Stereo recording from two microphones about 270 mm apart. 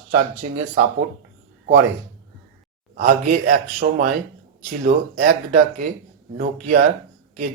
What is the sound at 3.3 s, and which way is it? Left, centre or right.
Speech, right.